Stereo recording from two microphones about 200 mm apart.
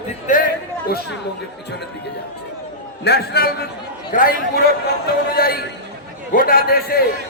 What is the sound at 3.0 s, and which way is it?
A man's voice, 55° left (ahead or behind).